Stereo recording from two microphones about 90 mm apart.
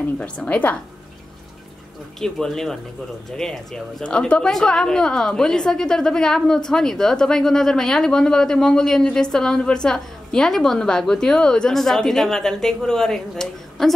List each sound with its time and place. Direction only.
0.2 s a woman's voice: 15° left (ahead or behind)
2.1 s speech: 5° left (ahead or behind)